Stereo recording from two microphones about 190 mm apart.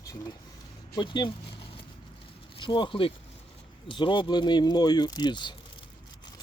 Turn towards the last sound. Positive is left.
turn(degrees=25)  # may be behind; listen again after turning